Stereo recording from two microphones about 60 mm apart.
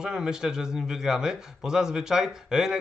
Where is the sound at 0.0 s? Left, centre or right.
Centre.